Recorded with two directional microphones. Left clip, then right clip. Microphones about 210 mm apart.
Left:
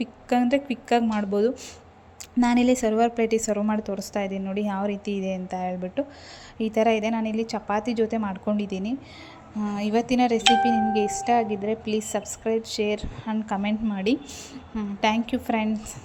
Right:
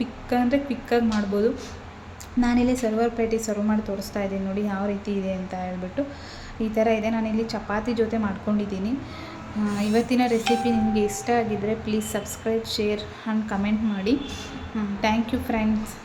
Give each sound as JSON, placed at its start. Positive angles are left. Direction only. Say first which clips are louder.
{"t": 0.0, "sound": "speech", "louder": "even", "side_deg": 35}